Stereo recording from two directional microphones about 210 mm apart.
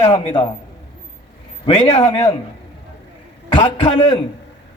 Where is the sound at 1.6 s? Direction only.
30° left (ahead or behind).